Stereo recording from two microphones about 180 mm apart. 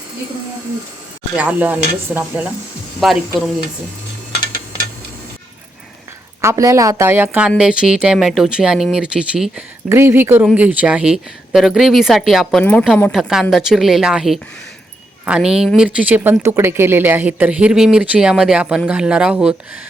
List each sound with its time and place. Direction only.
1.4 s speech: 10° right (ahead or behind)
6.4 s speech: 15° right (ahead or behind)